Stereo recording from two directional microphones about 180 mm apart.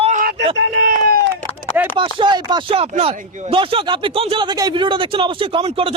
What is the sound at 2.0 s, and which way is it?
Speech, 25° right (ahead or behind).